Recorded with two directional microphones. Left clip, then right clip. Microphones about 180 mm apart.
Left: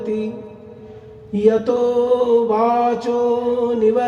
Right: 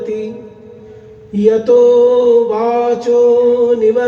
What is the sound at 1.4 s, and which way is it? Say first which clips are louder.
Mantra: right 7 dB; 25° left (ahead or behind).